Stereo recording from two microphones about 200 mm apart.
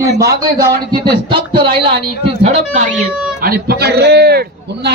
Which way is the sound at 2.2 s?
35° right (ahead or behind).